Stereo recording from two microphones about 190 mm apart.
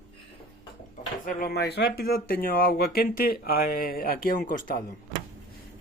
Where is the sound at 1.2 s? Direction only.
50° left (ahead or behind).